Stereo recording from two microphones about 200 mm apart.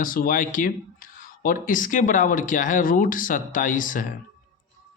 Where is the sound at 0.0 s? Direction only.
45° left (ahead or behind).